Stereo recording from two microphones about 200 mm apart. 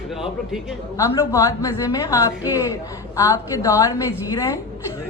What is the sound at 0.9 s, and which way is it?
A woman's voice, 15° left (ahead or behind).